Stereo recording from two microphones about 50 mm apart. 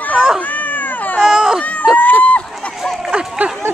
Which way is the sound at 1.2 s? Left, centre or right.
Centre.